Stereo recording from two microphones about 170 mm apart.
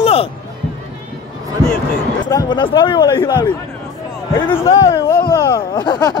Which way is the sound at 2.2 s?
25° left (ahead or behind).